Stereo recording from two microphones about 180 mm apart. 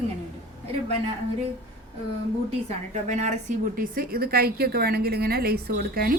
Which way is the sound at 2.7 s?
40° right (ahead or behind).